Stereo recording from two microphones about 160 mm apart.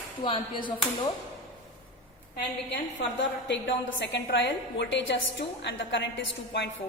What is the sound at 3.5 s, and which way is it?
Speech, 90° left.